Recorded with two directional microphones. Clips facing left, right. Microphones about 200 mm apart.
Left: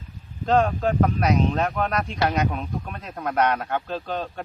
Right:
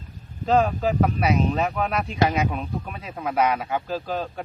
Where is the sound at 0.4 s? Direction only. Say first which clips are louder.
Even; 5° right (ahead or behind).